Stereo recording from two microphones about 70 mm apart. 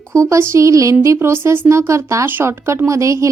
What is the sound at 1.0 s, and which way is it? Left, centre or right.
A woman's voice, right.